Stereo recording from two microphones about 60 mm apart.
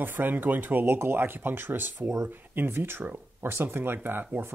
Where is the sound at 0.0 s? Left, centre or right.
Right.